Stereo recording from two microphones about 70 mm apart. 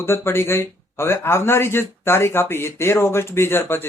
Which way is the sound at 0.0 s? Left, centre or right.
Left.